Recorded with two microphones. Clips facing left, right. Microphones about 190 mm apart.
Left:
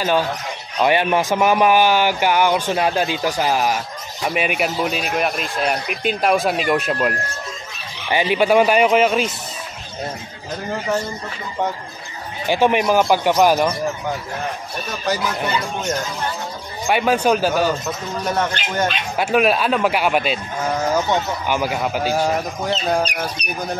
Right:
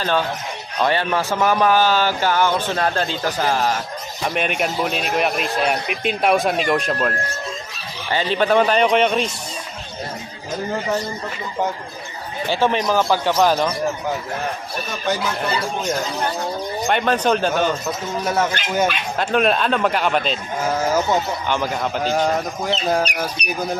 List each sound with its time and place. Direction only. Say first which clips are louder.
0.7 s a man's voice: left 3 dB; 15° left (ahead or behind)
12.4 s a man's voice: left 3 dB; 15° left (ahead or behind)
15.1 s a man's voice: even; centre (ahead or behind)
16.8 s a man's voice: left 2 dB; 10° left (ahead or behind)
18.2 s a man's voice: even; 5° right (ahead or behind)
19.1 s a man's voice: left 2 dB; 10° left (ahead or behind)
20.7 s a man's voice: even; 5° right (ahead or behind)
21.5 s a man's voice: left 1 dB; 10° left (ahead or behind)
23.4 s speech: right 2 dB; 60° right (ahead or behind)